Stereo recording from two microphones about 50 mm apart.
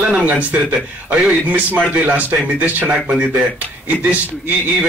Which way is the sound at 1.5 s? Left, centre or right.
Right.